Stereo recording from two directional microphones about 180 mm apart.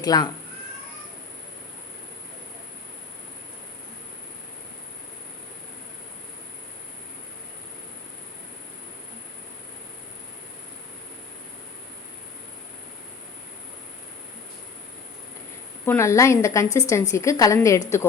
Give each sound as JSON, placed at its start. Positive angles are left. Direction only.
{"t": 0.0, "sound": "speech", "side_deg": 20}
{"t": 15.9, "sound": "a woman's voice", "side_deg": 15}